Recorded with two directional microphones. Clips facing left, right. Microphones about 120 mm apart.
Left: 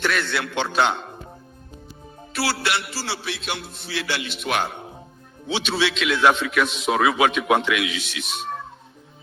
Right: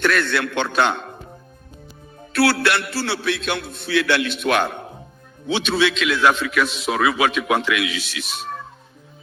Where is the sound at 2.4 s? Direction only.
60° right (ahead or behind).